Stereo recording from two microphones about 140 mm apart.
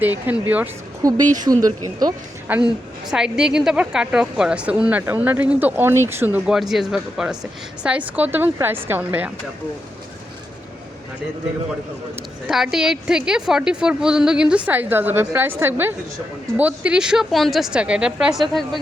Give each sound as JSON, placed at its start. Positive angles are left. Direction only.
{"t": 0.0, "sound": "a woman's voice", "side_deg": -10}
{"t": 1.0, "sound": "speech", "side_deg": -25}
{"t": 2.5, "sound": "a woman's voice", "side_deg": -10}
{"t": 12.5, "sound": "a woman's voice", "side_deg": -5}